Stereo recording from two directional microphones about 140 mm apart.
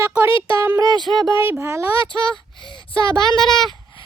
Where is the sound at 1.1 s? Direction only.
5° left (ahead or behind).